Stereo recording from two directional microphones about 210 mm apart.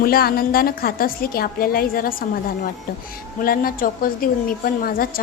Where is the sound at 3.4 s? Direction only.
45° left (ahead or behind).